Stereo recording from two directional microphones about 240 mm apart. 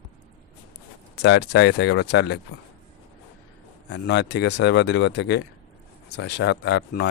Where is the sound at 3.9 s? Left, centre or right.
Left.